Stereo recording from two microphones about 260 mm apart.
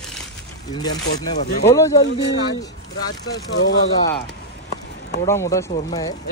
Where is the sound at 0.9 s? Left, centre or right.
Left.